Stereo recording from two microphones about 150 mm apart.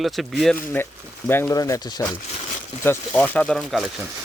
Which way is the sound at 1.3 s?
20° left (ahead or behind).